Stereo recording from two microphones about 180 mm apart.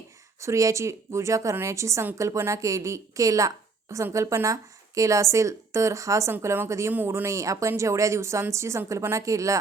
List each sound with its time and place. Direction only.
0.4 s a woman's voice: 15° right (ahead or behind)